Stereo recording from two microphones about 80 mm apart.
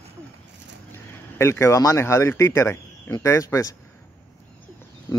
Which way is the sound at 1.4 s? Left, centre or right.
Left.